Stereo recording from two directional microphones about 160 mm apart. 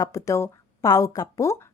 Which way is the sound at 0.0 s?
20° left (ahead or behind).